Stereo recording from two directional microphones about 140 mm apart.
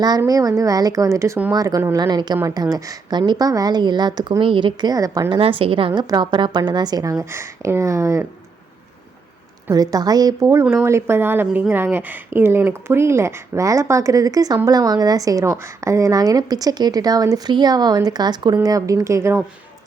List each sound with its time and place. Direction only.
0.2 s speech: 25° right (ahead or behind)
5.4 s speech: 40° right (ahead or behind); by 8.3 s 20° right (ahead or behind)
9.6 s speech: 25° right (ahead or behind)